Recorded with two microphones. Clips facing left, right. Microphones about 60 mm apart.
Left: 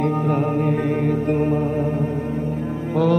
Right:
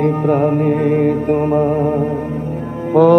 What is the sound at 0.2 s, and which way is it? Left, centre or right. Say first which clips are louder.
Mantra: right 6 dB; right.